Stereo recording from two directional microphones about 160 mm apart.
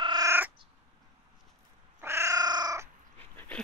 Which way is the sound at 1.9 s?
15° right (ahead or behind).